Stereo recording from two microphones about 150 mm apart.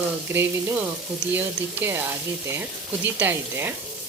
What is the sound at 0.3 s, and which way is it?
Speech, 15° right (ahead or behind).